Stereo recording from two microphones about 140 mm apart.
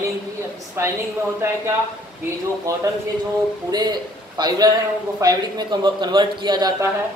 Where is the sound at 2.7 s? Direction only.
20° right (ahead or behind).